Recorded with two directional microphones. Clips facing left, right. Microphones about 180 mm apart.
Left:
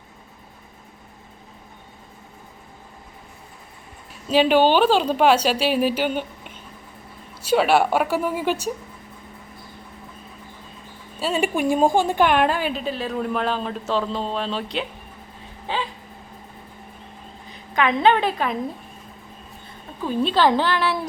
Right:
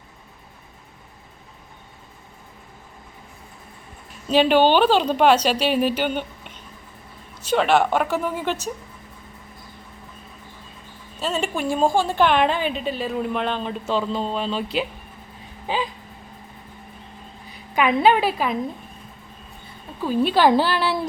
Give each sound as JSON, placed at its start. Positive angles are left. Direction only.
{"t": 4.1, "sound": "a woman's voice", "side_deg": 5}
{"t": 11.2, "sound": "a woman's voice", "side_deg": 10}
{"t": 15.6, "sound": "a sound", "side_deg": -15}
{"t": 17.5, "sound": "a woman's voice", "side_deg": -10}
{"t": 20.0, "sound": "a woman's voice", "side_deg": -10}
{"t": 20.8, "sound": "a sound", "side_deg": -30}